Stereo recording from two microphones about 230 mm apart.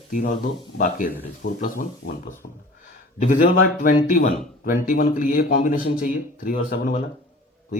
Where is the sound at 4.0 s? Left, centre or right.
Left.